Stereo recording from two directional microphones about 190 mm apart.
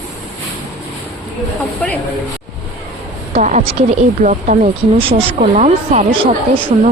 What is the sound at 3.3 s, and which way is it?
Speech, 35° right (ahead or behind).